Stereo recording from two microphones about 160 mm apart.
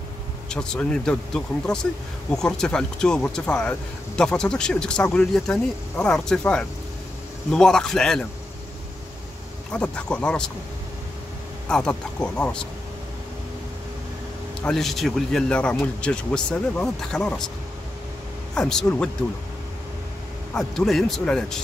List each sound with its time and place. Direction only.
0.5 s speech: 5° left (ahead or behind)
9.7 s speech: 5° left (ahead or behind)
11.7 s speech: 5° left (ahead or behind)
14.6 s speech: centre (ahead or behind)
18.5 s speech: 5° left (ahead or behind)
20.5 s speech: centre (ahead or behind)